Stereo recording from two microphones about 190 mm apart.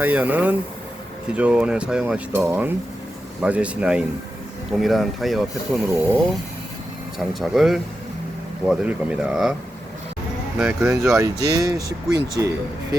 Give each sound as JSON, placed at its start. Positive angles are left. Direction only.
{"t": 0.0, "sound": "speech", "side_deg": -10}
{"t": 7.2, "sound": "speech", "side_deg": 0}
{"t": 10.6, "sound": "speech", "side_deg": -5}
{"t": 11.1, "sound": "speech", "side_deg": -15}